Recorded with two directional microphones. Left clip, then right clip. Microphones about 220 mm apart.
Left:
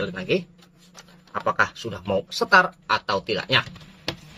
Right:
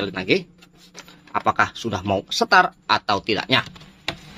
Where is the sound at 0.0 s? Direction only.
30° right (ahead or behind).